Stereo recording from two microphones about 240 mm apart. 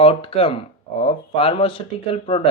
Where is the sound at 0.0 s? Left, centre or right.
Left.